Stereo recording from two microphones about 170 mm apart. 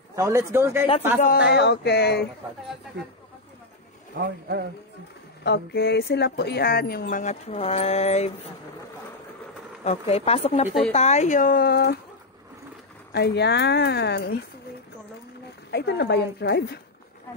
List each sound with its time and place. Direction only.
0.1 s speech: 15° right (ahead or behind)
1.5 s speech: 80° left
4.2 s speech: 70° right (ahead or behind)
5.4 s speech: 75° left (ahead or behind)
7.2 s speech: 40° left (ahead or behind)
9.8 s speech: 35° left (ahead or behind); by 12.0 s 70° left (ahead or behind)
13.1 s speech: 75° left (ahead or behind)
15.7 s speech: 75° left (ahead or behind)